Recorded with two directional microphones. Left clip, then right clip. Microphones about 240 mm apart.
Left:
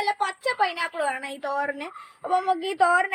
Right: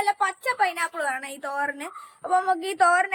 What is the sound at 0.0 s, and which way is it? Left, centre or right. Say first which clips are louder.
A woman's voice: right 1 dB; centre.